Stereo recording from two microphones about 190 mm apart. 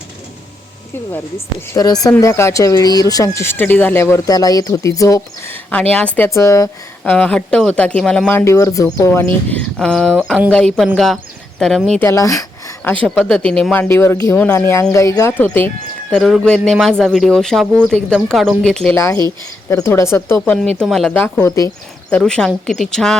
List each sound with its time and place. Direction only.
1.7 s speech: 20° left (ahead or behind)
7.0 s speech: 5° left (ahead or behind)
9.5 s speech: 5° left (ahead or behind)
11.9 s speech: 15° left (ahead or behind)
13.1 s speech: centre (ahead or behind)
18.9 s speech: 15° left (ahead or behind)
20.4 s speech: centre (ahead or behind); by 21.7 s 15° left (ahead or behind)
22.1 s speech: 5° left (ahead or behind)